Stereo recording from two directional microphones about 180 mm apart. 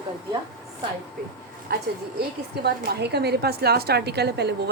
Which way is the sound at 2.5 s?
65° right (ahead or behind).